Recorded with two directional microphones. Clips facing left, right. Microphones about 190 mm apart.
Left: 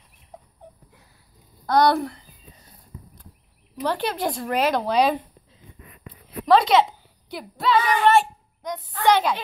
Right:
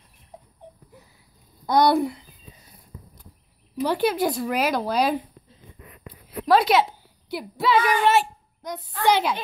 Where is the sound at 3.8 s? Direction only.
10° right (ahead or behind).